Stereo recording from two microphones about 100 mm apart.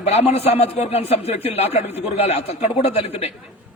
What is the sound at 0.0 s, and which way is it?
A man's voice, 90° left.